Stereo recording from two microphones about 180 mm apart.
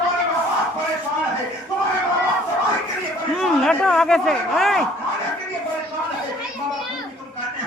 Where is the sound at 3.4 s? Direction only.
5° left (ahead or behind).